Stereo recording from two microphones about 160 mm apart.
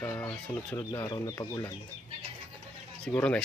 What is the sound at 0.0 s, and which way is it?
Speech, 10° left (ahead or behind).